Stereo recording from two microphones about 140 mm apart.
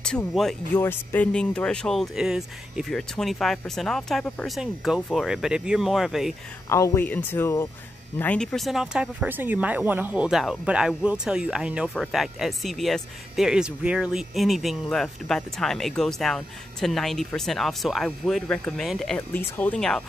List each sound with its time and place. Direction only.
0.0 s speech: 5° left (ahead or behind)
0.7 s speech: 15° left (ahead or behind); by 6.3 s centre (ahead or behind)
6.7 s speech: 20° left (ahead or behind)